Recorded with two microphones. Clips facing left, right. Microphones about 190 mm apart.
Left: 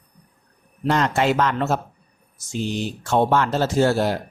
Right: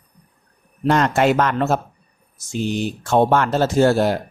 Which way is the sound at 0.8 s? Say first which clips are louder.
Right 3 dB; 55° right (ahead or behind).